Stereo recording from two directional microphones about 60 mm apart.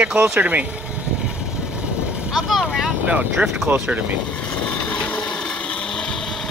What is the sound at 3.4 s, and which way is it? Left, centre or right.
Speech, centre.